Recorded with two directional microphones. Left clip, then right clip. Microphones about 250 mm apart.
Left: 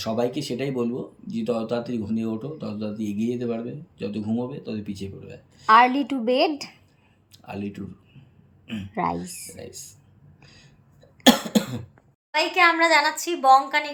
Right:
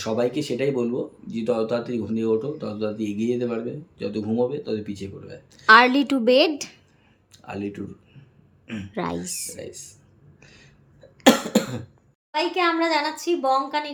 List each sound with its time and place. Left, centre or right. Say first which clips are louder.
0.0 s speech: right 2 dB; centre
6.2 s speech: right 4 dB; right
7.3 s speech: right 3 dB; centre
9.6 s speech: right 3 dB; centre
11.2 s cough: right 1 dB; centre
12.3 s a woman's voice: left 3 dB; centre